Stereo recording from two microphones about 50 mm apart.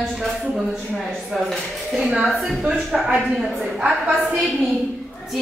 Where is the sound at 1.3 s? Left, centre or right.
Centre.